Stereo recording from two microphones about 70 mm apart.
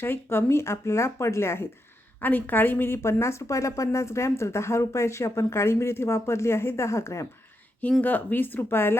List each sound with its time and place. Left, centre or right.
0.0 s speech: left
2.2 s speech: left
8.0 s speech: left